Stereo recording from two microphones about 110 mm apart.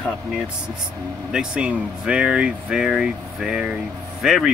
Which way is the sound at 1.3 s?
5° right (ahead or behind).